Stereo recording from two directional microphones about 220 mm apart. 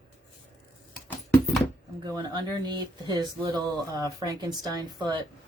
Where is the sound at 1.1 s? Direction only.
5° left (ahead or behind).